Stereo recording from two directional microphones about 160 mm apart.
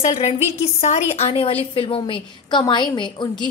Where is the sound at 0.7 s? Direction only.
45° left (ahead or behind).